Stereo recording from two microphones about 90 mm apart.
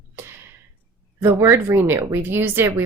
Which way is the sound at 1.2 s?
30° right (ahead or behind).